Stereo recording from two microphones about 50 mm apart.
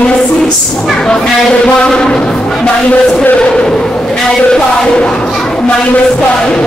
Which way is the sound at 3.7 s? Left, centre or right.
Centre.